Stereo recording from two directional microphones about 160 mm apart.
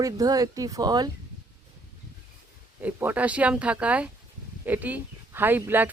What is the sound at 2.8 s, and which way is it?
Speech, 10° right (ahead or behind).